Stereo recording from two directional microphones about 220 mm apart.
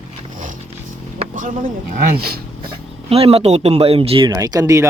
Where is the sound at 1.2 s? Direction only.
35° right (ahead or behind).